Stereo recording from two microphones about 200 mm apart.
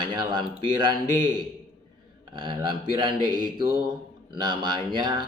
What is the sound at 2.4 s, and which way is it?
Speech, 25° right (ahead or behind).